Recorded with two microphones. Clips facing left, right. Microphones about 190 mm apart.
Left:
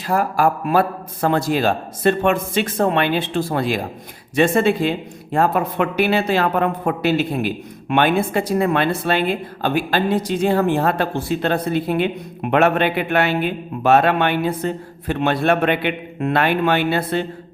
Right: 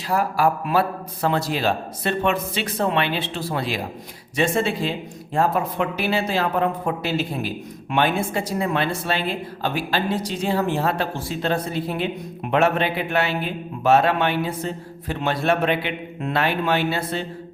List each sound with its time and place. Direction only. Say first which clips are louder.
0.1 s a man's voice: left 2 dB; 50° left (ahead or behind)